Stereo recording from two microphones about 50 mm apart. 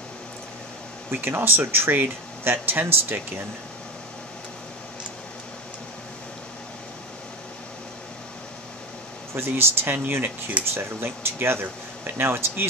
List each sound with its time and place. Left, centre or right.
1.1 s speech: right
9.3 s speech: right